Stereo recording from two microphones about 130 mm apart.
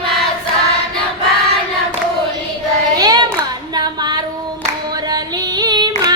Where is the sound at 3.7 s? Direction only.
30° right (ahead or behind).